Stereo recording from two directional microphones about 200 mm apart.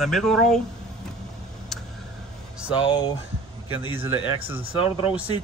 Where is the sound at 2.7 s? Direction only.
25° left (ahead or behind).